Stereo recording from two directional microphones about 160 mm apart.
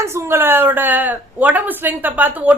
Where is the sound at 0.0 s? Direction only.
15° right (ahead or behind).